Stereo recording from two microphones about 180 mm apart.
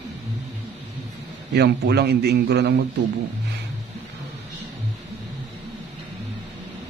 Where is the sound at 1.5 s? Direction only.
65° right (ahead or behind).